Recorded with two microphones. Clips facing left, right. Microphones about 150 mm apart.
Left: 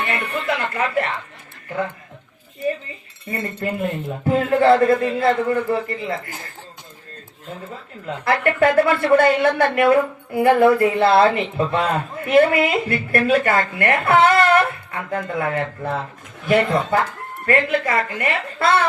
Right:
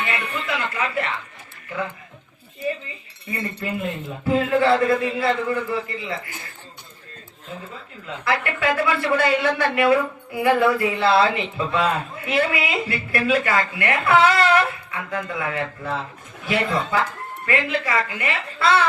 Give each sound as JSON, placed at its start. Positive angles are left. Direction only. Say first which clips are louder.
{"t": 0.0, "sound": "music", "louder": "left 3 dB", "side_deg": 50}
{"t": 3.2, "sound": "speech", "louder": "left 3 dB", "side_deg": 50}
{"t": 8.0, "sound": "speech", "louder": "left 5 dB", "side_deg": 50}